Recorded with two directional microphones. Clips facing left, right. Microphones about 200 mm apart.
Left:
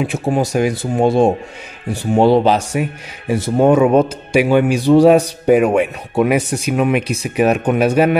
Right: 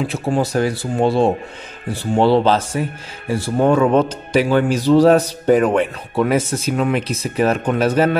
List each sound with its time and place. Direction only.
0.0 s speech: 15° left (ahead or behind)